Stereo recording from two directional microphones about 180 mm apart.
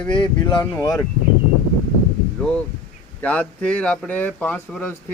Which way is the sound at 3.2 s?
5° left (ahead or behind).